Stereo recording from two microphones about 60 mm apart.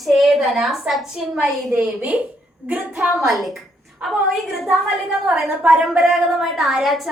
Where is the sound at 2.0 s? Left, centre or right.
Right.